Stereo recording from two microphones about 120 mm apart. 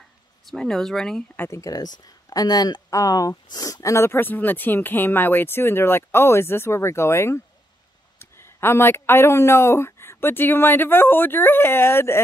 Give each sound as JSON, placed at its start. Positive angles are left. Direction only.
{"t": 0.5, "sound": "speech", "side_deg": 5}
{"t": 1.4, "sound": "speech", "side_deg": 25}